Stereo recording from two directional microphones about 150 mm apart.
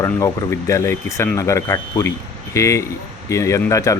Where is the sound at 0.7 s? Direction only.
20° left (ahead or behind).